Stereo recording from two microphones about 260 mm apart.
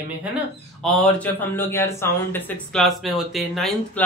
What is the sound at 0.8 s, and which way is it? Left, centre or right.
Speech, centre.